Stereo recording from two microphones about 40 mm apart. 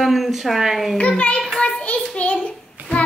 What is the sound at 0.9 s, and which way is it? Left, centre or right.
Speech, left.